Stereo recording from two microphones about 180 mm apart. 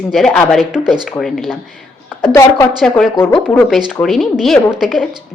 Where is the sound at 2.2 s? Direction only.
15° left (ahead or behind).